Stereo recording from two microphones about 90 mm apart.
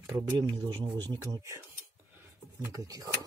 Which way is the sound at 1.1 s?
40° right (ahead or behind).